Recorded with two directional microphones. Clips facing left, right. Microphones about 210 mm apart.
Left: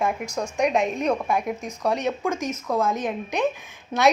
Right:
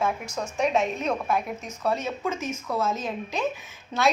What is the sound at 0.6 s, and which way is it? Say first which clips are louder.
A woman's voice: left 2 dB; 10° left (ahead or behind).